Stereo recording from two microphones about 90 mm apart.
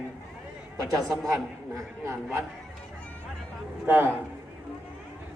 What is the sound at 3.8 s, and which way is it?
Speech, 25° right (ahead or behind).